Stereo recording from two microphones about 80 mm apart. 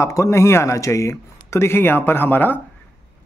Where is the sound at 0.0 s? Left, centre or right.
Left.